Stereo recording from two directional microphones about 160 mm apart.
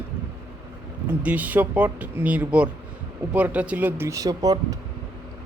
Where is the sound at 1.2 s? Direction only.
10° right (ahead or behind).